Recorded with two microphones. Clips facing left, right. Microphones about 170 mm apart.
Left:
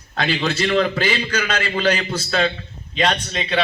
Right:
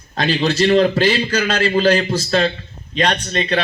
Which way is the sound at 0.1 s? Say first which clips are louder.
Right 4 dB; 35° right (ahead or behind).